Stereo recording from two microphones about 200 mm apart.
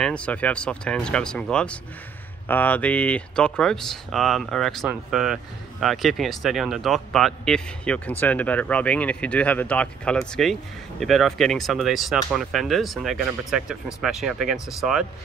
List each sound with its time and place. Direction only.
0.0 s speech: 5° left (ahead or behind)